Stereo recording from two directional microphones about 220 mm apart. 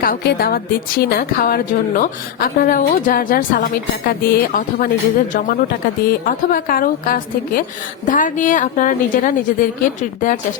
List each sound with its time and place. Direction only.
0.0 s a woman's voice: 45° left (ahead or behind)